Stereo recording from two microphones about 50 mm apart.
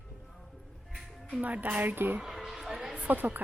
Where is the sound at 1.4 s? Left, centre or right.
Right.